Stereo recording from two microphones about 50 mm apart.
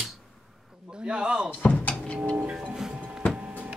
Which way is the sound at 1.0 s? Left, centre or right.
Centre.